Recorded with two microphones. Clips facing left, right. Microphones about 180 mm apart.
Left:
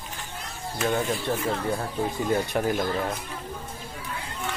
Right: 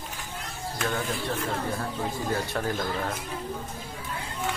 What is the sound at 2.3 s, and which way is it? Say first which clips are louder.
Speech: left 5 dB; 15° left (ahead or behind).